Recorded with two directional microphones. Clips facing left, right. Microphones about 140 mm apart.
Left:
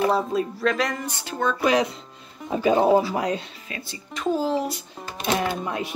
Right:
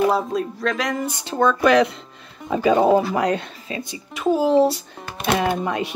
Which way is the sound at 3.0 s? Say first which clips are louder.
Right 4 dB; 65° right (ahead or behind).